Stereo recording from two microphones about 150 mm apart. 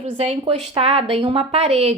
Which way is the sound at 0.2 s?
50° right (ahead or behind).